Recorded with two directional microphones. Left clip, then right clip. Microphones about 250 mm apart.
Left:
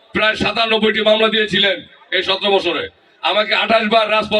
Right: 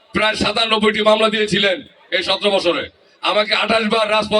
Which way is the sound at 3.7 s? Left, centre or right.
Right.